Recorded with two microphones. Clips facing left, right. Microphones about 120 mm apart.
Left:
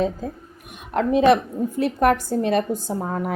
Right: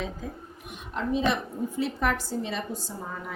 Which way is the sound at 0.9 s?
65° left (ahead or behind).